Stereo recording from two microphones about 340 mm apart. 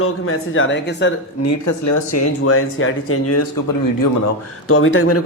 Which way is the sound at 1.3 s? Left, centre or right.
Left.